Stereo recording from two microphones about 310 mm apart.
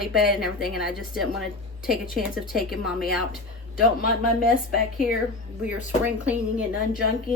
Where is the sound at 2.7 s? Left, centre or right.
Centre.